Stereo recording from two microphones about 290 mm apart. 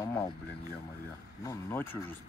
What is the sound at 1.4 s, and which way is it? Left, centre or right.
Speech, centre.